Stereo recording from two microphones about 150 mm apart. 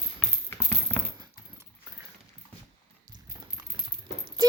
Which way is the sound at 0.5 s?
10° left (ahead or behind).